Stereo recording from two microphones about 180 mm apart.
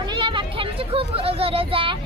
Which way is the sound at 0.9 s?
30° right (ahead or behind).